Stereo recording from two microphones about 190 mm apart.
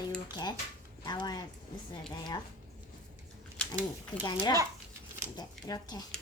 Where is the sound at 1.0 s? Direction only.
20° left (ahead or behind).